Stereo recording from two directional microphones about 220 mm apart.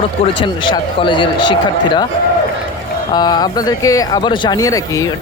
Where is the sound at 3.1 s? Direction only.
20° left (ahead or behind).